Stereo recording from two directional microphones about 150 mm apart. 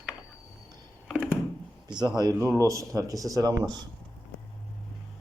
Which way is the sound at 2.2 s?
20° right (ahead or behind).